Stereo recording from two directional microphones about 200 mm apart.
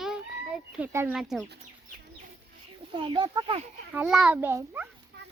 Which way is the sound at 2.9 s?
25° right (ahead or behind).